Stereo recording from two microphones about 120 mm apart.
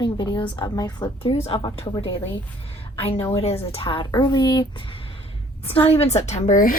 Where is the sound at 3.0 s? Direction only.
55° left (ahead or behind); by 4.6 s 35° left (ahead or behind).